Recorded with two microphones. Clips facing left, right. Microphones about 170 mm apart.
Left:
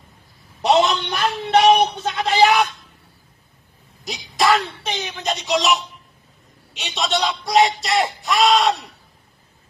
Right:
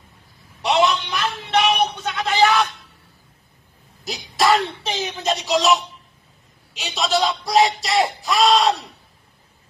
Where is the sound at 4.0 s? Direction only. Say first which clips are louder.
Even; centre (ahead or behind).